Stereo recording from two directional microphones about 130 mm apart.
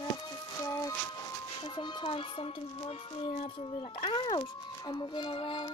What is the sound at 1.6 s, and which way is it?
Speech, 35° left (ahead or behind).